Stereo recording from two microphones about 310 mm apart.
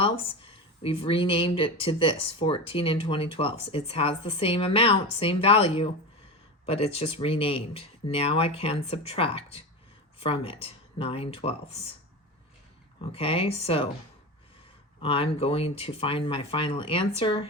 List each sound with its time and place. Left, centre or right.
0.0 s speech: centre
13.1 s speech: centre
15.0 s speech: centre